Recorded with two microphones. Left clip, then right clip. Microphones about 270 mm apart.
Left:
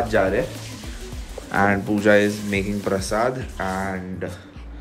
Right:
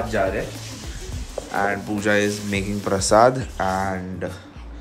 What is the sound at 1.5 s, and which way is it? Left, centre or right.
Speech, left.